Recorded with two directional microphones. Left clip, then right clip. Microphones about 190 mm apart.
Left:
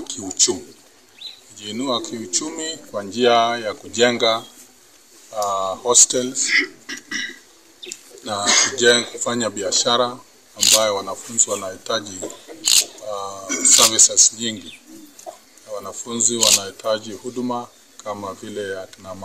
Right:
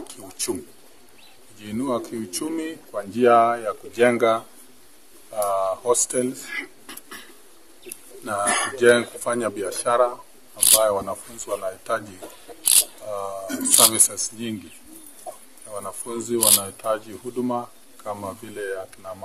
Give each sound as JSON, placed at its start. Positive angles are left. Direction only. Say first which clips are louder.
{"t": 0.0, "sound": "speech", "louder": "left 12 dB", "side_deg": -10}
{"t": 1.7, "sound": "speech", "louder": "left 3 dB", "side_deg": -5}
{"t": 6.5, "sound": "a sound", "louder": "left 13 dB", "side_deg": -35}
{"t": 7.9, "sound": "speech", "louder": "left 1 dB", "side_deg": -5}
{"t": 13.1, "sound": "speech", "louder": "even", "side_deg": -10}
{"t": 15.3, "sound": "a sound", "louder": "left 1 dB", "side_deg": 30}
{"t": 15.7, "sound": "speech", "louder": "left 3 dB", "side_deg": -5}